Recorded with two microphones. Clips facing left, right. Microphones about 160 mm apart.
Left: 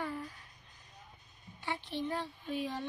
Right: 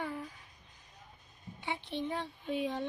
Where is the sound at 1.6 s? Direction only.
20° right (ahead or behind).